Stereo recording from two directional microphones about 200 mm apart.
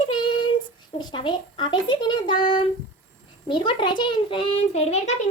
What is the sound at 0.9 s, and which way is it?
A child's voice, 25° left (ahead or behind).